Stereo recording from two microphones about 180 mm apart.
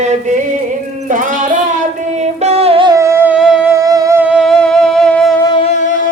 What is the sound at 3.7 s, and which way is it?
Music, 20° right (ahead or behind).